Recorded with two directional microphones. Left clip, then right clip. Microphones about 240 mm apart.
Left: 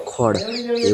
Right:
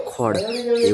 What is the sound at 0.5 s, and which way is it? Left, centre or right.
Speech, right.